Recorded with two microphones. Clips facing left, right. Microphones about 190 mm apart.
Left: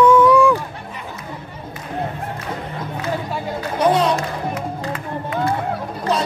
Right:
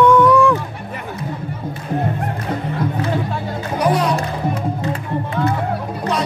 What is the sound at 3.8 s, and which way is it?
Music, 25° left (ahead or behind).